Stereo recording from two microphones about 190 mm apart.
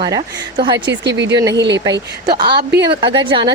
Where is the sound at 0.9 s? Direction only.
70° right (ahead or behind).